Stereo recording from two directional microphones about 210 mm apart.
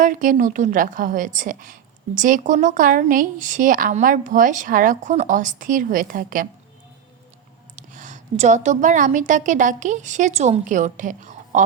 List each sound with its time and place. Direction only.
0.0 s a woman's voice: 40° right (ahead or behind)
7.8 s a woman's voice: 35° right (ahead or behind)